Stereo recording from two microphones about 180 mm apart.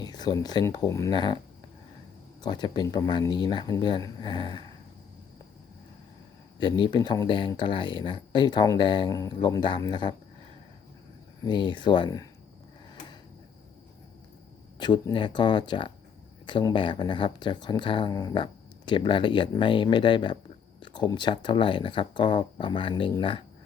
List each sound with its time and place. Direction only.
0.0 s speech: 20° left (ahead or behind)
2.4 s speech: 25° left (ahead or behind)
6.6 s speech: 25° left (ahead or behind)
11.4 s speech: 25° left (ahead or behind)
14.8 s speech: 25° left (ahead or behind)